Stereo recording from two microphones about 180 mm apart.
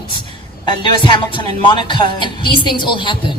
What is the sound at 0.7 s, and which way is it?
Speech, 25° left (ahead or behind).